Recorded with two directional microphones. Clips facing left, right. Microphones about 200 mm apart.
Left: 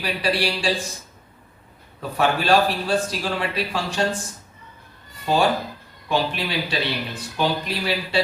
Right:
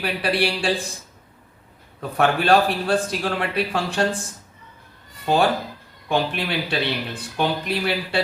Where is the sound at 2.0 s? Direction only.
55° right (ahead or behind).